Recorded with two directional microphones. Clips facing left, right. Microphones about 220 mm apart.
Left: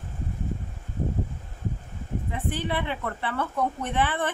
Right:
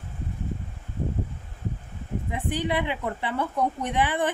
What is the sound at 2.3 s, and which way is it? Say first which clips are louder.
Speech: right 3 dB; 15° right (ahead or behind).